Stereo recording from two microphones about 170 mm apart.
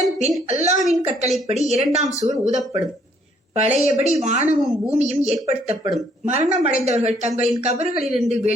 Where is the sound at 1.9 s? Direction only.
40° right (ahead or behind).